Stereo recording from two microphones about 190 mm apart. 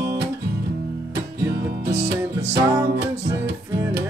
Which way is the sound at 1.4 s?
60° right (ahead or behind).